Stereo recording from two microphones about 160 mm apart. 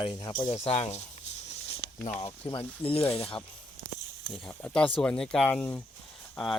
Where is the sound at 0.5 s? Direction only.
40° left (ahead or behind).